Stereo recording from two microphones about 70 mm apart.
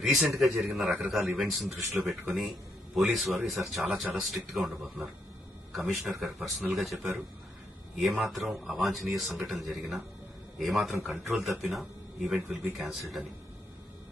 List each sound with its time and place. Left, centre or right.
0.0 s a man's voice: centre
5.9 s speech: centre